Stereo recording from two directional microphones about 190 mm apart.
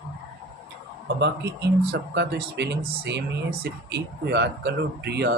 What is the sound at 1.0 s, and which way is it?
Speech, 65° right (ahead or behind).